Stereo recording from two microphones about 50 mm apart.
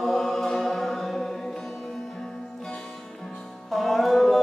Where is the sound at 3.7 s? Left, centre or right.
Centre.